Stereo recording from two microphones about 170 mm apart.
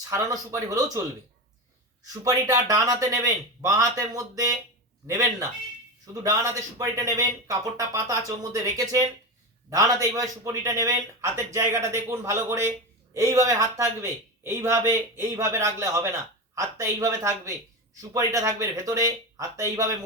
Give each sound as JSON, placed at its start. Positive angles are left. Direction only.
{"t": 0.1, "sound": "speech", "side_deg": -20}
{"t": 2.2, "sound": "speech", "side_deg": -20}